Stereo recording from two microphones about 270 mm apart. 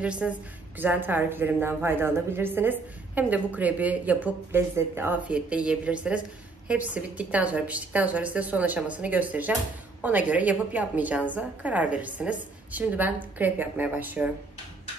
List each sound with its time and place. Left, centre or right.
0.0 s a woman's voice: centre